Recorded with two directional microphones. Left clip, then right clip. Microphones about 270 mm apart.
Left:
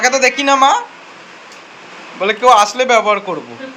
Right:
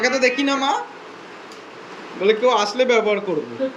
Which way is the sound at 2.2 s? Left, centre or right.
Centre.